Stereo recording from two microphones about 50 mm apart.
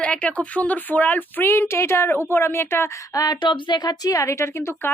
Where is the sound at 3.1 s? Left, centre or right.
Left.